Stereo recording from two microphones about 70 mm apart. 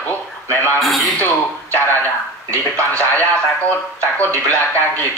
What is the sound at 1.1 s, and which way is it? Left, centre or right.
Speech, left.